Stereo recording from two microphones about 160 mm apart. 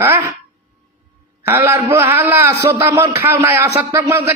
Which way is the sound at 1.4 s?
15° right (ahead or behind).